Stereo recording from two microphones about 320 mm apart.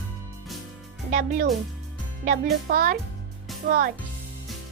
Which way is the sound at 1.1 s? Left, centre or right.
Right.